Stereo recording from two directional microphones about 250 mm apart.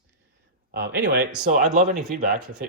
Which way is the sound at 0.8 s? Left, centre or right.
Right.